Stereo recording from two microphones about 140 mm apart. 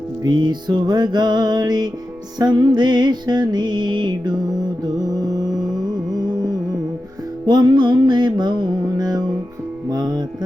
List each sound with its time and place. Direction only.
0.2 s music: 30° right (ahead or behind)
7.4 s music: 30° right (ahead or behind)